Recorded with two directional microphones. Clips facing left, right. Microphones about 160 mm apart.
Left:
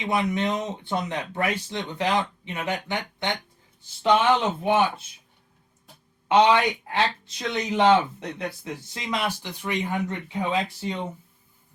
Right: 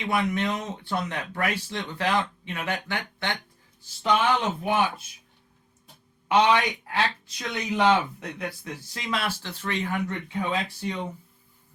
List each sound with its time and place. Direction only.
0.1 s speech: 20° left (ahead or behind)
6.2 s speech: 25° left (ahead or behind)